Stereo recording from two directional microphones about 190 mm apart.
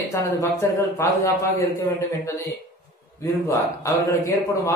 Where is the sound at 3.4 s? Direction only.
15° left (ahead or behind).